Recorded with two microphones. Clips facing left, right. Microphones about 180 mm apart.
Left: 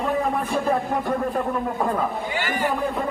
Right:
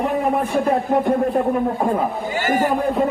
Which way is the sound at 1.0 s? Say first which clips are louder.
Right 6 dB; 20° right (ahead or behind).